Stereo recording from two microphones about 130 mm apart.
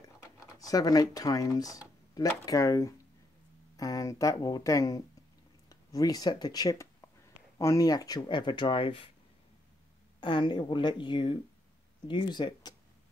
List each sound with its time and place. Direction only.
0.0 s speech: 25° left (ahead or behind); by 9.1 s 45° left (ahead or behind)
10.2 s speech: 35° left (ahead or behind)